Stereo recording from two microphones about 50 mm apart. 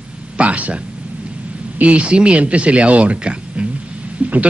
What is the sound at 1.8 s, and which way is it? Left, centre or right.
A man's voice, right.